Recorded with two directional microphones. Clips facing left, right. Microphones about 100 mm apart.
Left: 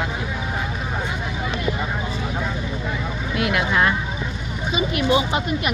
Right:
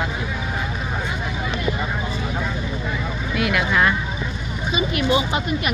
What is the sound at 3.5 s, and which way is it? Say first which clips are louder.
Speech: even; 25° left (ahead or behind).